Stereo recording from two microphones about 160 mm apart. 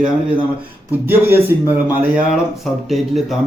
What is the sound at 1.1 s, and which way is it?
Speech, 10° right (ahead or behind).